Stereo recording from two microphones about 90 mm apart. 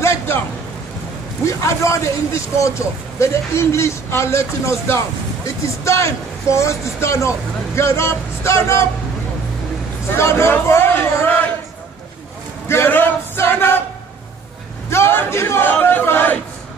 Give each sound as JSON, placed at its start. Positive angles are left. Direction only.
{"t": 0.0, "sound": "a sound", "side_deg": 30}
{"t": 1.4, "sound": "speech", "side_deg": 35}
{"t": 10.1, "sound": "a man's voice", "side_deg": 30}
{"t": 12.6, "sound": "male singing", "side_deg": 25}
{"t": 14.9, "sound": "a man's voice", "side_deg": 25}